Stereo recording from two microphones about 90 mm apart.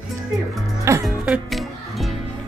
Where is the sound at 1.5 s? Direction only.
Centre (ahead or behind).